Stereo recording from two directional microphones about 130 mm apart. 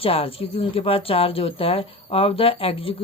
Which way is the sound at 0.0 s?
45° left (ahead or behind).